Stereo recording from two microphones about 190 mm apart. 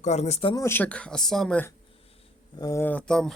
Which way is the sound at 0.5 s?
15° left (ahead or behind).